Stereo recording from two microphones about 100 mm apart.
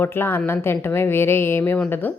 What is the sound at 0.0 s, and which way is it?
A woman's voice, 20° left (ahead or behind).